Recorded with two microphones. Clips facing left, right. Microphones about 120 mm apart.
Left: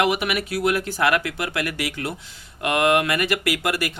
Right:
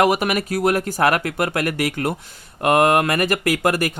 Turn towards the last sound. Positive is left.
turn(degrees=-45)  # may be behind; listen again after turning